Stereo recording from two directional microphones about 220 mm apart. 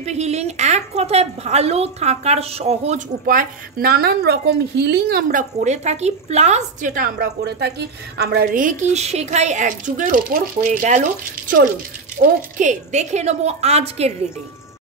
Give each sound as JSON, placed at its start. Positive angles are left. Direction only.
{"t": 0.0, "sound": "a woman's voice", "side_deg": -30}